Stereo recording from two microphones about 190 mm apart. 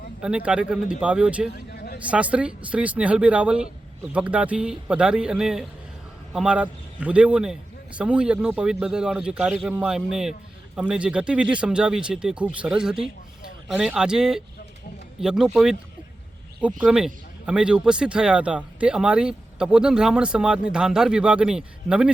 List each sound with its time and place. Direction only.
0.2 s speech: 5° right (ahead or behind)
1.5 s a sound: 55° left (ahead or behind)
2.0 s speech: 5° right (ahead or behind)